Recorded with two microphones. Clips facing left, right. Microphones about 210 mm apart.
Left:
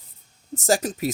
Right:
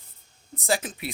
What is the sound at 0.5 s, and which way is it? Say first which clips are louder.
Speech: left 5 dB; 45° left (ahead or behind).